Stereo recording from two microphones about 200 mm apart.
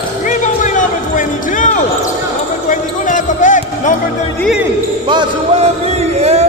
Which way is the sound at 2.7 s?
40° left (ahead or behind).